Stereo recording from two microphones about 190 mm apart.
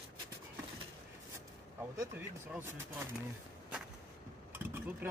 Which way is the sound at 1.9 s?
10° right (ahead or behind).